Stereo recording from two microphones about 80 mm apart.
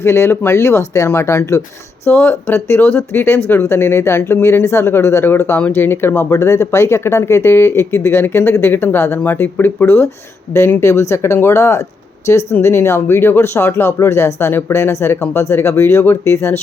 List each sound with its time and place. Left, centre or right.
0.0 s speech: left